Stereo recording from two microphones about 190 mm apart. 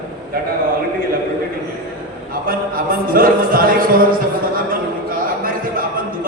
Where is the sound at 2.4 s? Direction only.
50° right (ahead or behind).